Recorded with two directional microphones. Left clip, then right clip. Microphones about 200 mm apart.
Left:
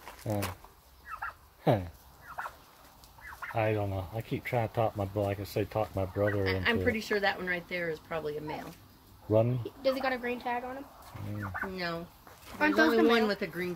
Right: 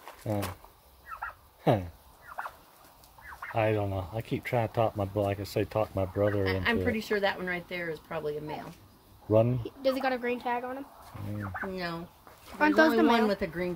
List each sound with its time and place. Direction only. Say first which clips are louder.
0.3 s speech: right 2 dB; 10° right (ahead or behind)
1.6 s speech: right 1 dB; 10° right (ahead or behind)
3.5 s speech: right 3 dB; 20° right (ahead or behind)
6.4 s speech: even; 65° right (ahead or behind)
9.3 s speech: right 2 dB; 20° right (ahead or behind)
9.6 s speech: right 1 dB; 60° right (ahead or behind)